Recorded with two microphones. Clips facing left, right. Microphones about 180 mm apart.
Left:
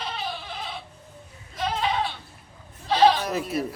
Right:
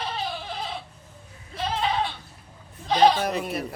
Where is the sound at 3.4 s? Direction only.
60° right (ahead or behind).